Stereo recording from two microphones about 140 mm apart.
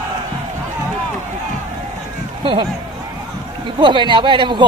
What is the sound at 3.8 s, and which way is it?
Speech, 35° right (ahead or behind).